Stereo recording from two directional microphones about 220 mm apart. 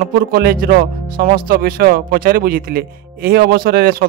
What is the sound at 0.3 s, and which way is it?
Speech, 45° right (ahead or behind).